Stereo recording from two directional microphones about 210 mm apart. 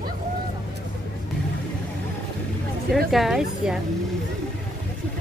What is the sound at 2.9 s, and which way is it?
Speech, centre (ahead or behind).